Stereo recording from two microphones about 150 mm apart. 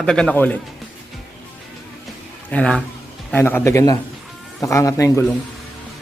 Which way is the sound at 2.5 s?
5° left (ahead or behind).